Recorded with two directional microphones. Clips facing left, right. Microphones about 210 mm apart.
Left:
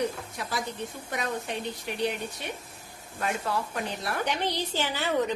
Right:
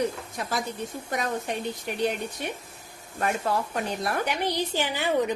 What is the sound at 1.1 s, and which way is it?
Speech, 45° right (ahead or behind).